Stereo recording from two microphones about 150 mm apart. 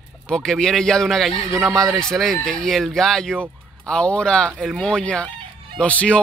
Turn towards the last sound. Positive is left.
turn(degrees=10)  # may be behind; listen again after turning